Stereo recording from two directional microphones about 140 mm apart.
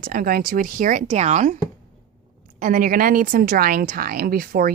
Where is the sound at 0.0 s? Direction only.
90° right; by 1.5 s 60° right (ahead or behind).